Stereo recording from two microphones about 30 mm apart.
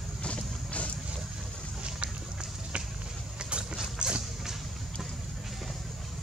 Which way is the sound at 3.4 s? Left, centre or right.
Right.